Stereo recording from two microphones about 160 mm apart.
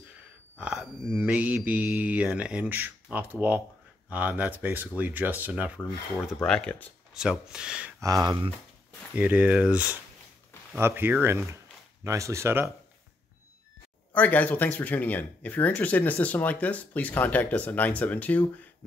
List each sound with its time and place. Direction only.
0.6 s mantra: 5° right (ahead or behind)
4.1 s speech: 10° right (ahead or behind)
6.2 s speech: 5° left (ahead or behind)
8.0 s speech: 20° right (ahead or behind)
9.1 s speech: 10° right (ahead or behind)
14.1 s speech: 10° left (ahead or behind)